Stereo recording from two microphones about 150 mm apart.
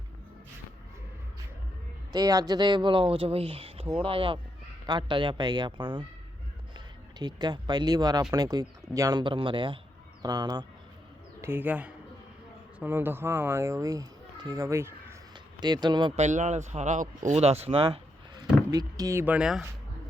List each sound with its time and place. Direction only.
2.1 s speech: 25° right (ahead or behind)
11.3 s speech: 15° right (ahead or behind)
15.6 s speech: 30° right (ahead or behind)
16.1 s speech: 50° right (ahead or behind)
18.7 s speech: 25° right (ahead or behind); by 19.6 s 5° right (ahead or behind)